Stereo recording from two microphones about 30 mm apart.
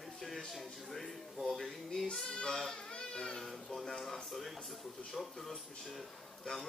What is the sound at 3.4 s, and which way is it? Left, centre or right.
Speech, centre.